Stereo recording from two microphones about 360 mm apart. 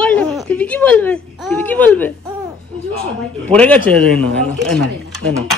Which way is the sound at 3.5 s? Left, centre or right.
Centre.